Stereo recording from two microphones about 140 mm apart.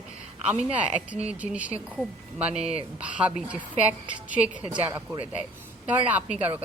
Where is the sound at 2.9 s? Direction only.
10° right (ahead or behind).